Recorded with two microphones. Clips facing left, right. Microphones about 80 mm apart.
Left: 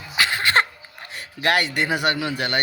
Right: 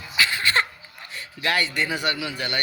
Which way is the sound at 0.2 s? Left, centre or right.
Left.